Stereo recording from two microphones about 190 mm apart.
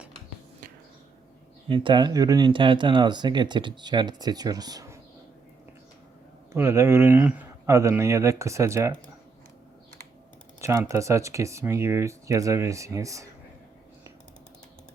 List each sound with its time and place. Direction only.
1.6 s speech: 25° right (ahead or behind)
6.5 s speech: 15° right (ahead or behind)
10.6 s speech: 15° right (ahead or behind)